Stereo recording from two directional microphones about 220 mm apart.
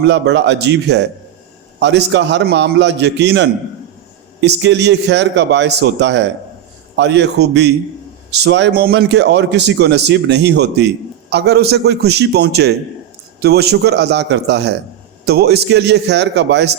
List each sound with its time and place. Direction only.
0.1 s speech: 50° right (ahead or behind)